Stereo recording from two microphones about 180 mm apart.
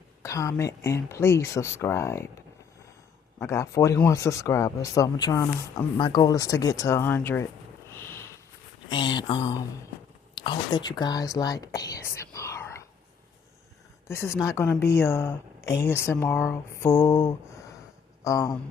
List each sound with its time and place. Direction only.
0.2 s speech: 15° left (ahead or behind)
3.4 s speech: 15° left (ahead or behind)
7.9 s a sound: 15° left (ahead or behind)
8.9 s speech: 25° left (ahead or behind)
14.1 s speech: 15° left (ahead or behind)